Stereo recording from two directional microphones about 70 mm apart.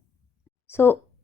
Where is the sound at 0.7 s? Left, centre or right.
Left.